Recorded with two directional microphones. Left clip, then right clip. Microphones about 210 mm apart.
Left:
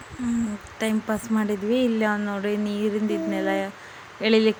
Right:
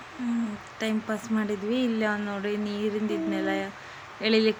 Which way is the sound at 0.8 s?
20° left (ahead or behind).